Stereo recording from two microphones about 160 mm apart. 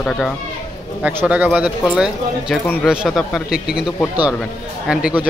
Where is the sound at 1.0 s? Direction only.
10° right (ahead or behind).